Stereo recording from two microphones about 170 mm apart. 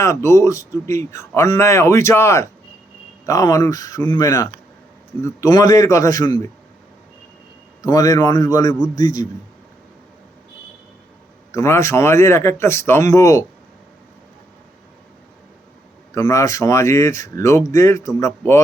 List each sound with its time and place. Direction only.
0.0 s a man's voice: 15° left (ahead or behind)
7.8 s a man's voice: 20° left (ahead or behind)
11.5 s a man's voice: 15° left (ahead or behind)
16.1 s a man's voice: 20° left (ahead or behind)